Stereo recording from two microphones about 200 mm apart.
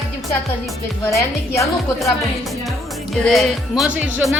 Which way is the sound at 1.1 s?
15° left (ahead or behind).